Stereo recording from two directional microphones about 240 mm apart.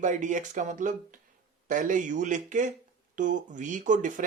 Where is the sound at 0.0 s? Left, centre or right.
Right.